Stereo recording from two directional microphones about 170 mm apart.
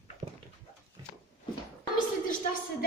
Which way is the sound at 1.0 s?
25° right (ahead or behind).